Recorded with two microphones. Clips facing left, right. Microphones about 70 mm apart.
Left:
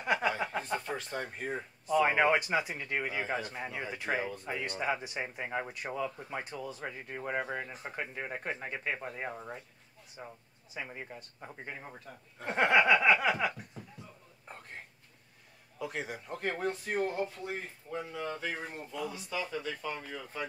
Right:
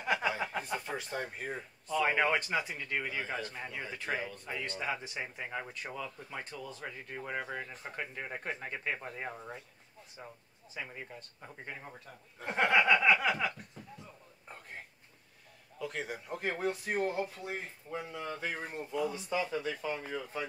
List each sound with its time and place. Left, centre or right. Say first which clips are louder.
0.0 s chuckle: left 2 dB; centre
1.9 s a man's voice: left 3 dB; centre
15.8 s a man's voice: left 1 dB; centre
19.1 s speech: right 3 dB; right
19.5 s speech: right 2 dB; centre